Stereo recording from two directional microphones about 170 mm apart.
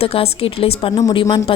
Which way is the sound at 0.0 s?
35° left (ahead or behind).